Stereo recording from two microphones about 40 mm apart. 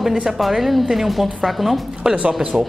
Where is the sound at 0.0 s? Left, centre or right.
Centre.